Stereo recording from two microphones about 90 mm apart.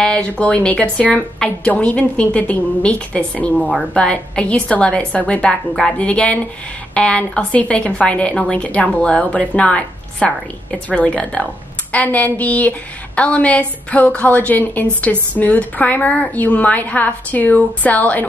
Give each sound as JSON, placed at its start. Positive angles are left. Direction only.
{"t": 0.0, "sound": "a woman's voice", "side_deg": 15}